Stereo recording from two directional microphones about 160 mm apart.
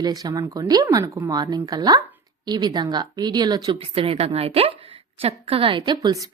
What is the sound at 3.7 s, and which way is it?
A woman's voice, 35° right (ahead or behind).